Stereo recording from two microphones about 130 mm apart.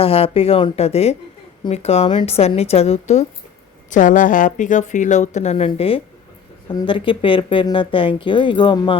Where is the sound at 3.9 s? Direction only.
80° left; by 6.0 s 45° left (ahead or behind).